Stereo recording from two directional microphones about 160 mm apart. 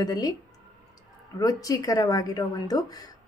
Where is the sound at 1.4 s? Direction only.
20° left (ahead or behind).